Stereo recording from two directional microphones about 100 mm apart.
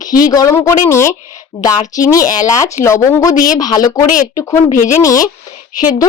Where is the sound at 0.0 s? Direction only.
35° left (ahead or behind).